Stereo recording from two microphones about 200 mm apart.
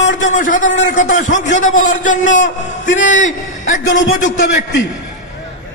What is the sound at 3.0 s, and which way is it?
Speech, 40° left (ahead or behind).